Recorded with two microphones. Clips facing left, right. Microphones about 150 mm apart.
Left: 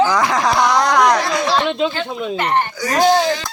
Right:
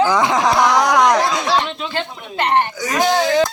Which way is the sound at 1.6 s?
70° left (ahead or behind).